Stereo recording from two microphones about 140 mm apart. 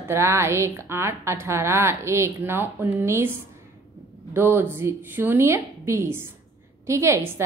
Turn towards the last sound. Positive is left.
turn(degrees=-20)  # may be behind; listen again after turning